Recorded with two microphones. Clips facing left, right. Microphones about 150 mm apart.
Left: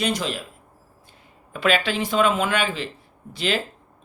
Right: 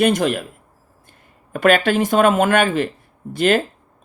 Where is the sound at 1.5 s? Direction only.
50° right (ahead or behind).